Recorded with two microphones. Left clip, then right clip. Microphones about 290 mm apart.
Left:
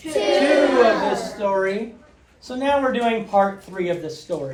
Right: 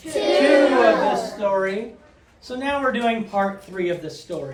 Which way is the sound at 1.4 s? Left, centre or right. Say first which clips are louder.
Left 3 dB; centre.